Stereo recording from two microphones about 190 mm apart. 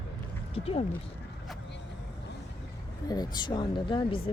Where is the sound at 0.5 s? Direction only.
30° left (ahead or behind).